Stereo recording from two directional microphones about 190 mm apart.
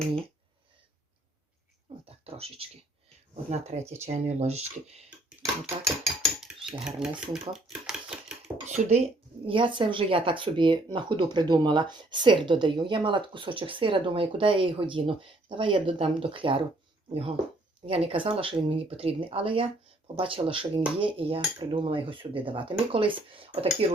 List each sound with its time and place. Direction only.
2.0 s a sound: 30° right (ahead or behind)
3.5 s speech: 35° right (ahead or behind)
5.8 s speech: centre (ahead or behind)
8.6 s speech: 35° right (ahead or behind)